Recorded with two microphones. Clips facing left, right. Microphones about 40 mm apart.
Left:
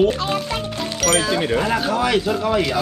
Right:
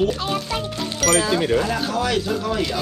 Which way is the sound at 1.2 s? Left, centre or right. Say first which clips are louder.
Even; left.